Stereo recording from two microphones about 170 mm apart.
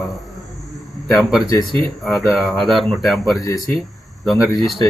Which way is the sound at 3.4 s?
20° left (ahead or behind).